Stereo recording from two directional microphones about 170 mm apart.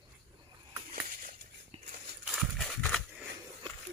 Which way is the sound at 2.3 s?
Centre (ahead or behind).